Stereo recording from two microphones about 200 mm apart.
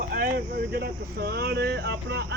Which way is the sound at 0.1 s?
45° right (ahead or behind).